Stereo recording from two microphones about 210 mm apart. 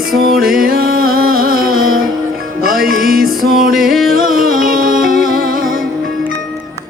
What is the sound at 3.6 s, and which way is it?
Music, 45° right (ahead or behind).